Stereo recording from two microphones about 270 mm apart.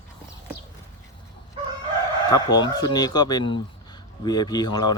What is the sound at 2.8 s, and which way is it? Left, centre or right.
Speech, centre.